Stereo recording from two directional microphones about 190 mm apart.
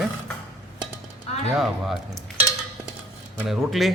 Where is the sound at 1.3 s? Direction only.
35° left (ahead or behind).